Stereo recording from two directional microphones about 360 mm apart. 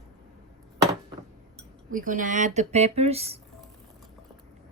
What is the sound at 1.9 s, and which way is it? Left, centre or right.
Speech, right.